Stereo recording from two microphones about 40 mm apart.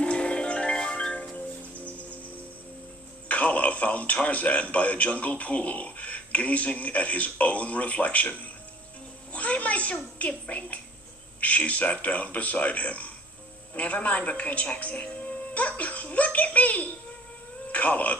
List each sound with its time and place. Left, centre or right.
0.0 s music: left
0.8 s marimba: centre
1.4 s music: left
3.2 s music: left
4.7 s speech: left
9.3 s a sound: left
10.2 s speech: left